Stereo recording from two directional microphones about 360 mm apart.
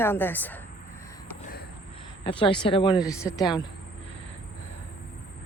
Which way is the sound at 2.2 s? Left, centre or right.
Centre.